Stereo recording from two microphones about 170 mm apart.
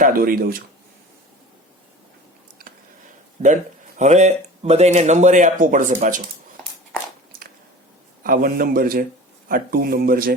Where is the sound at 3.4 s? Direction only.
45° right (ahead or behind).